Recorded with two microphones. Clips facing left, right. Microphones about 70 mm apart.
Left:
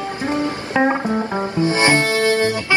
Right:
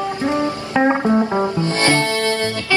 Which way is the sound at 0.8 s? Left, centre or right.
Centre.